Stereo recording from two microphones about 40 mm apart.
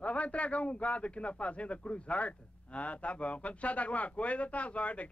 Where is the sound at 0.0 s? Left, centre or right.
Left.